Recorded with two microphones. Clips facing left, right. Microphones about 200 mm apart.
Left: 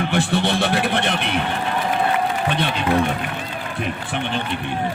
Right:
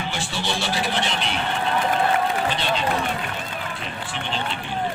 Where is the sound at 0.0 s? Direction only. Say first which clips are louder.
Left 9 dB; 60° left (ahead or behind).